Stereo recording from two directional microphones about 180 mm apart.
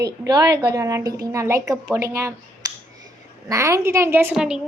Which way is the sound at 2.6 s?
20° right (ahead or behind).